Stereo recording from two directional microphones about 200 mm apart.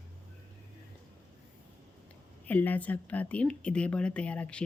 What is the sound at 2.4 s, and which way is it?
Speech, 10° left (ahead or behind).